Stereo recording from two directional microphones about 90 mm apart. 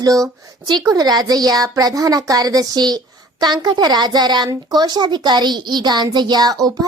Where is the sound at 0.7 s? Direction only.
50° right (ahead or behind).